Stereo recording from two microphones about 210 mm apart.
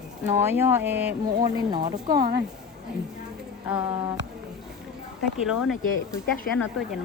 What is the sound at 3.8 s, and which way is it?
Speech, 20° right (ahead or behind).